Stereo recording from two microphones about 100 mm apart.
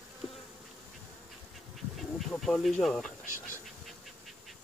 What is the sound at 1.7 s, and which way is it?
Bee, centre (ahead or behind).